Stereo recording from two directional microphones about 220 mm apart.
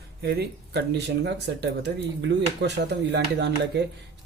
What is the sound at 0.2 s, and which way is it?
Speech, 45° right (ahead or behind).